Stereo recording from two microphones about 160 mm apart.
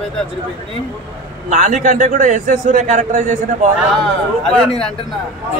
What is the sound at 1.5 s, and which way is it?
A man's voice, 50° right (ahead or behind).